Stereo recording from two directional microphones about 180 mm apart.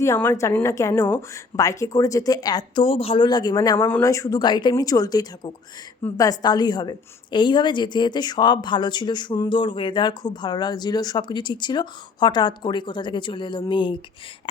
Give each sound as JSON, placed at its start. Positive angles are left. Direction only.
{"t": 0.0, "sound": "speech", "side_deg": 15}